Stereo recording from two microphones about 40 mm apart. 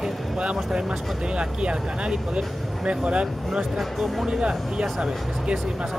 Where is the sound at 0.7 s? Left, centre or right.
Right.